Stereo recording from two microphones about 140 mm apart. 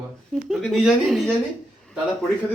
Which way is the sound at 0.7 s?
Centre (ahead or behind).